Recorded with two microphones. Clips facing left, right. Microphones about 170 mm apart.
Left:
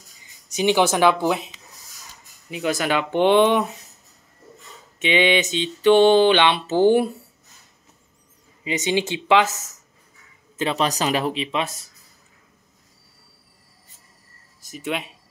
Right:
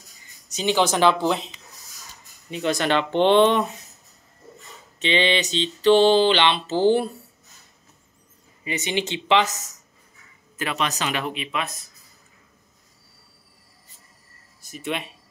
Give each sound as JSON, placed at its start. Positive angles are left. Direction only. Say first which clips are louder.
{"t": 0.6, "sound": "speech", "louder": "left 2 dB", "side_deg": 15}
{"t": 2.5, "sound": "speech", "louder": "even", "side_deg": 5}
{"t": 5.0, "sound": "speech", "louder": "left 3 dB", "side_deg": 10}
{"t": 8.6, "sound": "speech", "louder": "left 4 dB", "side_deg": 10}
{"t": 10.6, "sound": "speech", "louder": "left 4 dB", "side_deg": 30}